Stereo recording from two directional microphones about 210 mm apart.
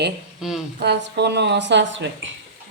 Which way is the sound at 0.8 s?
55° right (ahead or behind).